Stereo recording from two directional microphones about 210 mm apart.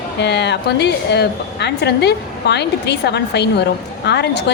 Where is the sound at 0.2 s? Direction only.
55° left (ahead or behind).